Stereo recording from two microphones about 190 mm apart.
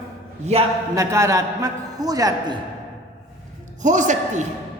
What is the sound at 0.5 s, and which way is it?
Speech, 35° right (ahead or behind).